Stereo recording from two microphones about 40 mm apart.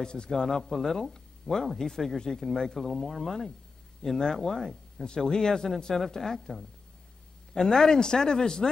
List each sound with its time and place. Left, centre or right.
0.0 s speech: left
7.5 s speech: centre